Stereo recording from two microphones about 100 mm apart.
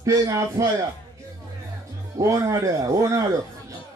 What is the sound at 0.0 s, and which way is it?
Speech, 35° right (ahead or behind).